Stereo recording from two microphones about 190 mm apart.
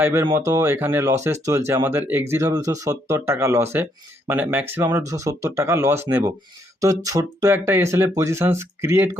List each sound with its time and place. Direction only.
0.0 s speech: 10° right (ahead or behind)